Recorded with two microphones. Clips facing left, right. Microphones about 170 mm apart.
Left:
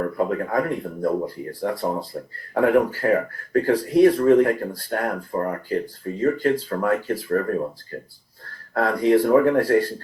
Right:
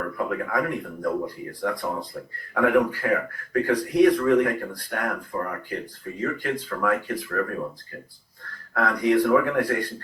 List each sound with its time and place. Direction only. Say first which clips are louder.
0.0 s speech: left 5 dB; 35° left (ahead or behind)